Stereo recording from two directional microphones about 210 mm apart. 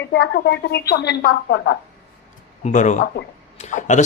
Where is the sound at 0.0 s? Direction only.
55° left (ahead or behind).